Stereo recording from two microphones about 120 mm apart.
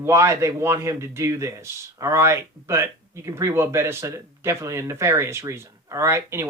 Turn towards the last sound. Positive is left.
turn(degrees=-20)  # may be behind; listen again after turning